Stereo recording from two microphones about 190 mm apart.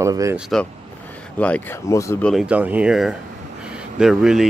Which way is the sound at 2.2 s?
Centre (ahead or behind).